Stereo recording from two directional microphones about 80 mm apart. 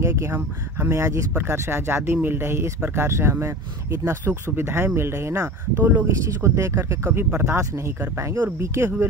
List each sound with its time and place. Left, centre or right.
0.0 s speech: right
7.1 s speech: right